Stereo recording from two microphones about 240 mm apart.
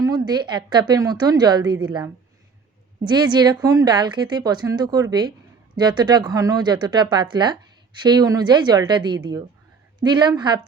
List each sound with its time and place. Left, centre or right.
0.3 s a woman's voice: centre